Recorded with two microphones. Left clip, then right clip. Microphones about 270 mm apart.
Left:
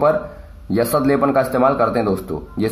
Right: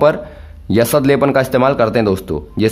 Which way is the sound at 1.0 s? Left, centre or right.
Right.